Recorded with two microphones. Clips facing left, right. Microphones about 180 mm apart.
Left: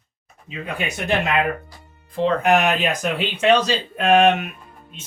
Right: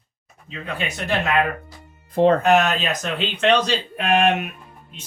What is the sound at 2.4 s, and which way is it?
Speech, 15° left (ahead or behind).